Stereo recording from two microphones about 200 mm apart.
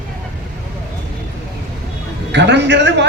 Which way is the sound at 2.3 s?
60° right (ahead or behind).